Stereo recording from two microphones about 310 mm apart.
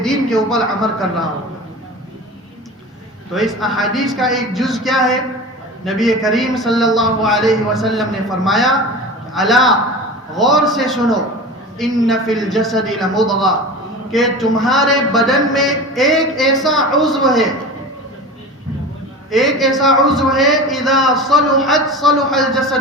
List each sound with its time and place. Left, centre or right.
0.0 s a man's voice: centre
3.3 s a man's voice: centre
19.3 s a man's voice: centre